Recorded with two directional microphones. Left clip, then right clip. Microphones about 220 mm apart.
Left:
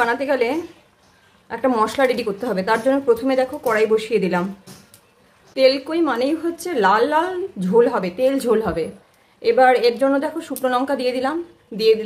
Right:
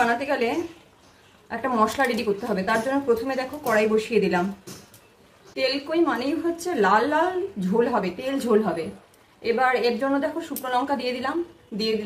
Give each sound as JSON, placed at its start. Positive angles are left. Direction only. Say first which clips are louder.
{"t": 0.0, "sound": "a woman's voice", "louder": "left 4 dB", "side_deg": 40}
{"t": 5.5, "sound": "a woman's voice", "louder": "left 8 dB", "side_deg": 45}